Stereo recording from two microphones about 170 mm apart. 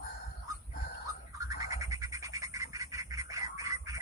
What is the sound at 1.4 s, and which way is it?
Bird, 20° right (ahead or behind).